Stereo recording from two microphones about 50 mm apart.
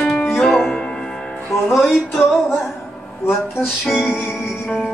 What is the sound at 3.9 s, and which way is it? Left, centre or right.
Music, centre.